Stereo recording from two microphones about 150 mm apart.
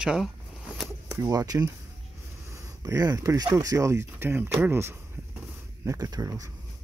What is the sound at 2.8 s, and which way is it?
Speech, 20° right (ahead or behind).